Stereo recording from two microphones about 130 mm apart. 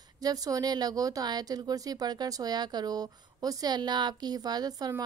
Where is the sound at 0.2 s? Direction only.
30° right (ahead or behind).